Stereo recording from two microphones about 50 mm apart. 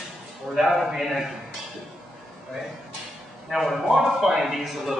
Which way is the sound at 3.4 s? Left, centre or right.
Centre.